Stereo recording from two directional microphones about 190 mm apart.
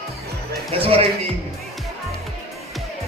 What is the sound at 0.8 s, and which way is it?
Speech, 30° right (ahead or behind).